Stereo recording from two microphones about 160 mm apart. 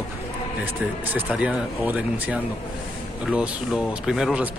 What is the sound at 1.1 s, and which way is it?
A man's voice, 10° right (ahead or behind).